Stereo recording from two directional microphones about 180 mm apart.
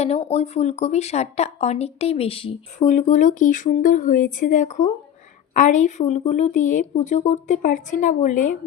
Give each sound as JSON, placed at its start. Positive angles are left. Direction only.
{"t": 0.0, "sound": "a woman's voice", "side_deg": 35}